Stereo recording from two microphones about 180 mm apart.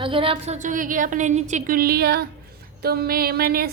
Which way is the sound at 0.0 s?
30° right (ahead or behind).